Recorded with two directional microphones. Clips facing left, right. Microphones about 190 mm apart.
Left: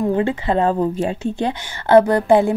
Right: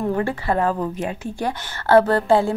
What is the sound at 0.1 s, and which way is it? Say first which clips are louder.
A woman's voice: left 3 dB; 20° left (ahead or behind).